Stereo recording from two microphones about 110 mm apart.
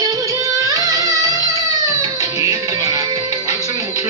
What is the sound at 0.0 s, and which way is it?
Music, 35° right (ahead or behind).